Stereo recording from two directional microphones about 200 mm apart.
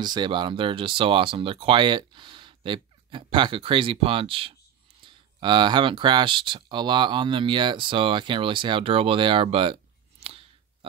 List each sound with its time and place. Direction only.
0.0 s speech: 20° right (ahead or behind)
10.2 s clicking: 30° right (ahead or behind)